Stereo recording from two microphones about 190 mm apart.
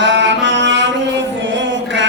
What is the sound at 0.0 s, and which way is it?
Music, 70° right (ahead or behind).